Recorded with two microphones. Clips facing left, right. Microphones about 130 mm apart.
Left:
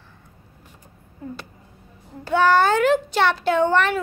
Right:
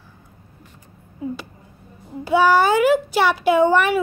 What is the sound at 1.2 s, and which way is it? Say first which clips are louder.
Speech: right 6 dB; 10° right (ahead or behind).